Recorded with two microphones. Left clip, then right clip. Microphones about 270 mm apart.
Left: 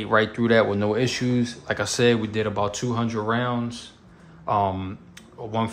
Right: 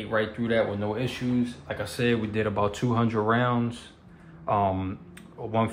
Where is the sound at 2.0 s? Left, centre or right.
Centre.